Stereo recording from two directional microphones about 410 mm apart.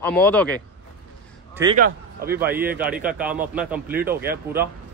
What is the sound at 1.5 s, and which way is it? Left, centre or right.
Speech, centre.